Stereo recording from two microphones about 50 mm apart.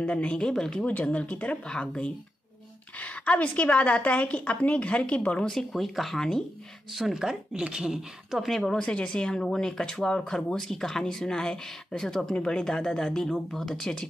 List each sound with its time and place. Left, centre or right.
0.0 s speech: left
1.1 s a woman's voice: left
3.0 s a woman's voice: left
5.4 s speech: centre
6.1 s speech: centre
6.9 s speech: centre
7.2 s speech: centre
8.5 s speech: centre
8.7 s speech: left